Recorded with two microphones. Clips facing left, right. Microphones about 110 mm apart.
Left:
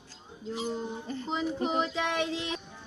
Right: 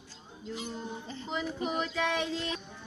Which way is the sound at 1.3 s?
30° left (ahead or behind).